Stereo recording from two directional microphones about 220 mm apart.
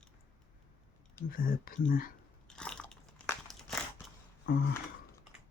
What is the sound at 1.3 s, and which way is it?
Speech, 40° left (ahead or behind).